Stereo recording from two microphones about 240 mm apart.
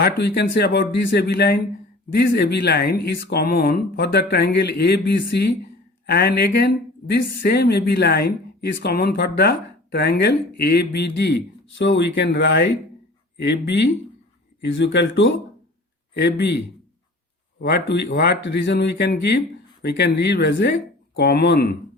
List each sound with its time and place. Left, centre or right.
0.0 s speech: left
17.6 s speech: left